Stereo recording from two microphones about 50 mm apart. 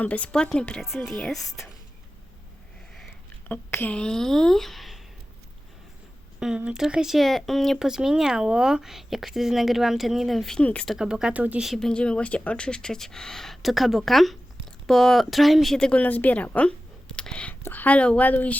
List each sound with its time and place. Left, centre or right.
0.0 s a woman's voice: left
0.3 s speech: centre
3.5 s speech: left
4.0 s speech: centre
6.4 s speech: centre
7.8 s speech: centre
10.6 s a woman's voice: left
10.9 s speech: centre
11.8 s speech: centre
16.0 s a woman's voice: left
17.7 s a woman's voice: left